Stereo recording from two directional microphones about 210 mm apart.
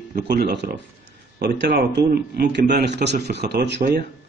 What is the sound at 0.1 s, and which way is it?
Speech, 45° right (ahead or behind).